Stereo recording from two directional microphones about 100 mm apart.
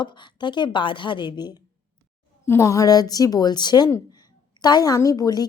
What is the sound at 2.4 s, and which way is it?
Speech, 30° left (ahead or behind).